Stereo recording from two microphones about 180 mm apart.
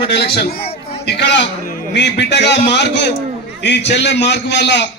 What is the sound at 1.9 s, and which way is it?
A man's voice, 75° left (ahead or behind).